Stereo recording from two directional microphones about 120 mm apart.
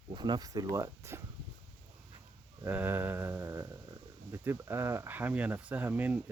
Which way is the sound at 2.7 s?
15° right (ahead or behind).